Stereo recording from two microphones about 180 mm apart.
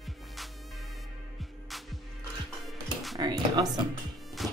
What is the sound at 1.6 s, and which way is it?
Music, centre (ahead or behind).